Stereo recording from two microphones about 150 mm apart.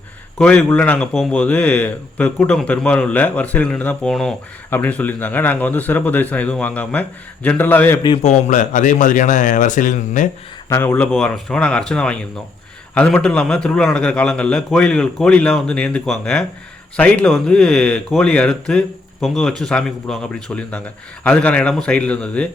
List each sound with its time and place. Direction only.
0.3 s speech: 5° left (ahead or behind)
8.2 s speech: 55° left (ahead or behind)
10.7 s a man's voice: 15° left (ahead or behind)